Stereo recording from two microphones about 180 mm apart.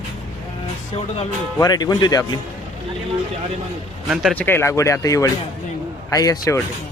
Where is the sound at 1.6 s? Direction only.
20° left (ahead or behind).